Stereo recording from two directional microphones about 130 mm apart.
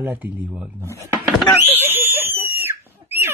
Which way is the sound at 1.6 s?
15° right (ahead or behind).